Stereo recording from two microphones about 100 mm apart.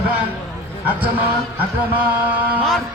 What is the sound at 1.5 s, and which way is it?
Speech, 20° right (ahead or behind).